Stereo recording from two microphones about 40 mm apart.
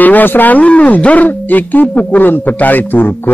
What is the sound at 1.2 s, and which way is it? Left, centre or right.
A man's voice, left.